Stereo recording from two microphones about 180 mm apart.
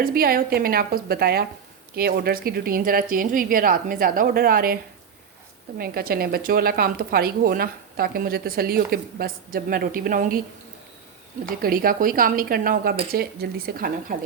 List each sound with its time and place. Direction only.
0.0 s a woman's voice: 55° right (ahead or behind)
11.4 s a woman's voice: 55° right (ahead or behind)